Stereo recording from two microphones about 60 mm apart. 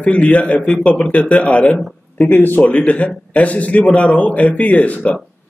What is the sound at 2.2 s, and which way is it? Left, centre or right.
A man's voice, left.